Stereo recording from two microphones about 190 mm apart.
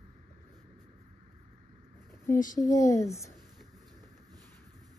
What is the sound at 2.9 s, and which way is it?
Speech, 15° left (ahead or behind).